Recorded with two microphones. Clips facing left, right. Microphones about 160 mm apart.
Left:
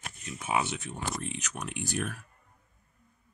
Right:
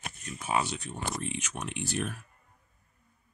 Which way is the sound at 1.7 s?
15° left (ahead or behind).